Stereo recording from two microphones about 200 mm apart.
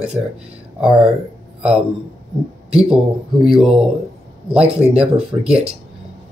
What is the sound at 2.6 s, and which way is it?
Speech, 5° right (ahead or behind).